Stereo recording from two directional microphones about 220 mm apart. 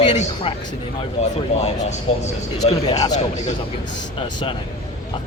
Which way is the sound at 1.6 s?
30° left (ahead or behind).